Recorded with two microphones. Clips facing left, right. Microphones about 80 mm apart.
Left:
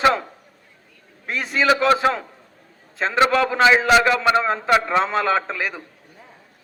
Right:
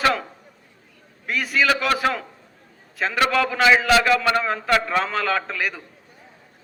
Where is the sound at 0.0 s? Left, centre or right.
Left.